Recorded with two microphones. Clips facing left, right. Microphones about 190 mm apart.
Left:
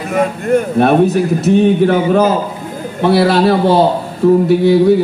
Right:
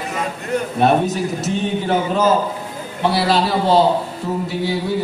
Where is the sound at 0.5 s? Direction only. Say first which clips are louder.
Left 4 dB; 55° left (ahead or behind).